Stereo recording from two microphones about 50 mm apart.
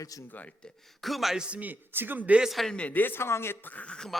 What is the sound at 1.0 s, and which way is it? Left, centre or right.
Speech, centre.